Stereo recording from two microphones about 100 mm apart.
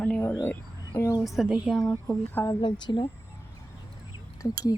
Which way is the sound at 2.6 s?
50° left (ahead or behind).